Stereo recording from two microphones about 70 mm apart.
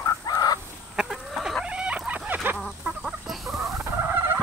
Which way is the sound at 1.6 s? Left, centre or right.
Centre.